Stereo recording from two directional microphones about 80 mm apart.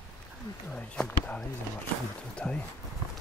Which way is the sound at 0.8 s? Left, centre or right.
Centre.